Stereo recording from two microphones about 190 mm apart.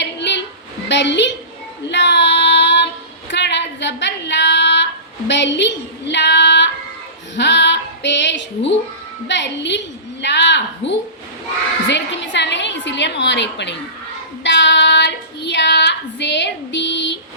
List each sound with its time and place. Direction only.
0.0 s a sound: 65° left (ahead or behind)
1.9 s female singing: 65° left (ahead or behind)
5.3 s child singing: 65° left (ahead or behind)
7.3 s female singing: 65° left (ahead or behind)
9.2 s a sound: 65° left (ahead or behind)
11.9 s a woman's voice: 70° left (ahead or behind)
14.4 s child singing: 70° left (ahead or behind)